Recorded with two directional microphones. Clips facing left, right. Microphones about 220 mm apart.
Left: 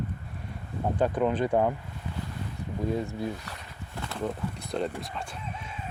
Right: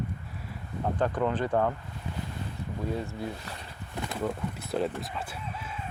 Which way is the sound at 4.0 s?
15° right (ahead or behind).